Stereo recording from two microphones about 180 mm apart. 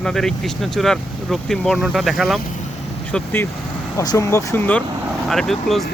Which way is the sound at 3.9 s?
15° left (ahead or behind).